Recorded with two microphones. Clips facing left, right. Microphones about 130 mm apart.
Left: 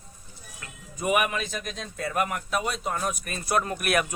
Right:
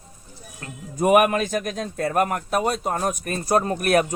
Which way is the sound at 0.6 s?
50° right (ahead or behind).